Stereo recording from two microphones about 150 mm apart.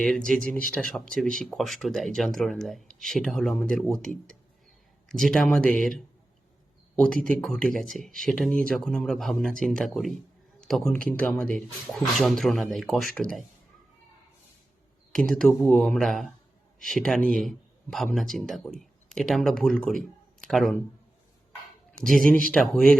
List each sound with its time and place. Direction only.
0.7 s speech: 5° left (ahead or behind)
15.1 s speech: 5° left (ahead or behind)
22.2 s speech: 65° right (ahead or behind)
22.5 s speech: 5° left (ahead or behind)